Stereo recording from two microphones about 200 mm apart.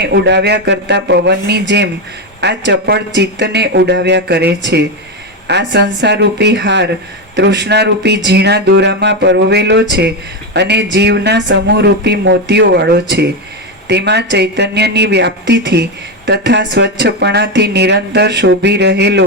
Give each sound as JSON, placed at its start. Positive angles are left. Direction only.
{"t": 0.0, "sound": "a woman's voice", "side_deg": -55}